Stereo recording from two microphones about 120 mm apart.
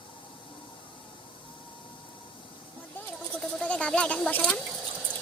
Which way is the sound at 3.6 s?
10° left (ahead or behind).